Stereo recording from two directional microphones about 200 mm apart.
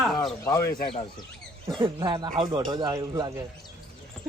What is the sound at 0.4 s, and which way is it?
Speech, 15° left (ahead or behind).